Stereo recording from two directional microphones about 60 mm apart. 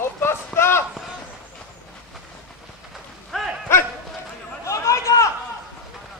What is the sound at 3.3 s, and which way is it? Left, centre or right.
Dog, centre.